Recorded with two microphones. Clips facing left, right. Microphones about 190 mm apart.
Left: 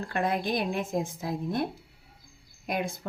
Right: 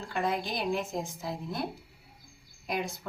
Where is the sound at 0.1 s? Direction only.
55° left (ahead or behind).